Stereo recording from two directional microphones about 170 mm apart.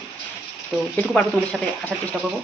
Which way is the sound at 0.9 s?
5° left (ahead or behind).